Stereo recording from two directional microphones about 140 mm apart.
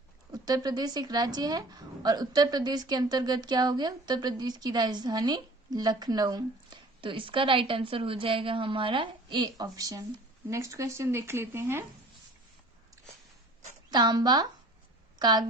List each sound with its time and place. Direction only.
0.3 s a woman's voice: 25° right (ahead or behind)
13.9 s a woman's voice: 30° right (ahead or behind)